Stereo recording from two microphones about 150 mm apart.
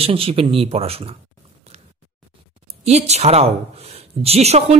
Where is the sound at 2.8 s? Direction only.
45° right (ahead or behind).